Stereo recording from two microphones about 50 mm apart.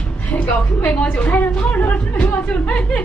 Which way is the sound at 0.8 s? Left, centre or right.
Left.